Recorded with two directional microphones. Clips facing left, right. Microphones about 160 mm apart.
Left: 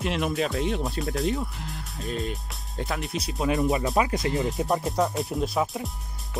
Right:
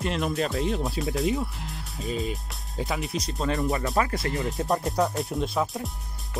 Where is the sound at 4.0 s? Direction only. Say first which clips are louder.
Left 2 dB; 20° left (ahead or behind).